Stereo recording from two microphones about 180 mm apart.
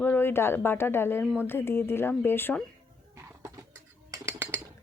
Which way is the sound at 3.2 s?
15° right (ahead or behind).